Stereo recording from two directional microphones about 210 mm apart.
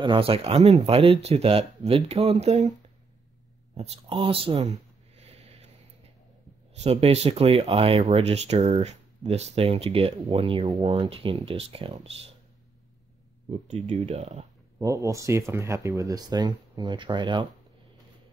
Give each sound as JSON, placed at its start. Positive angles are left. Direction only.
{"t": 0.0, "sound": "speech", "side_deg": -25}
{"t": 3.7, "sound": "a sound", "side_deg": -30}
{"t": 6.8, "sound": "speech", "side_deg": -30}
{"t": 13.5, "sound": "speech", "side_deg": -30}
{"t": 14.8, "sound": "speech", "side_deg": -15}